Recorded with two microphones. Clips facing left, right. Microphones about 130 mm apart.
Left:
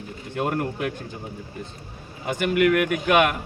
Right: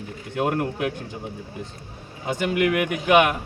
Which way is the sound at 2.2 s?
20° right (ahead or behind).